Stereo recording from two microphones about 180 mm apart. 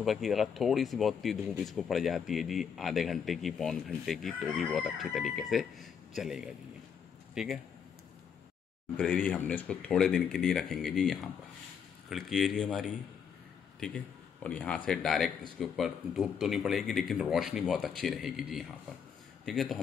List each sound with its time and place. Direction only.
0.0 s speech: centre (ahead or behind)
8.9 s a man's voice: 5° left (ahead or behind)